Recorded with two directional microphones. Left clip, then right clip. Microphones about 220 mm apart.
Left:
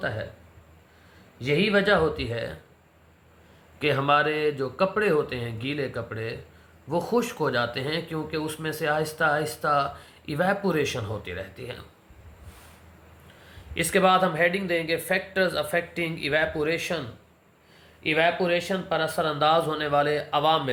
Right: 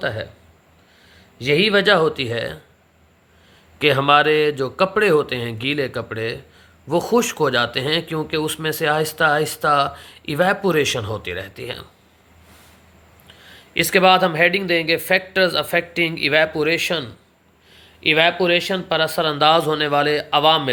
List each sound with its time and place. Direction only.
1.4 s speech: 45° right (ahead or behind)
3.8 s speech: 50° right (ahead or behind)
13.5 s speech: 45° right (ahead or behind)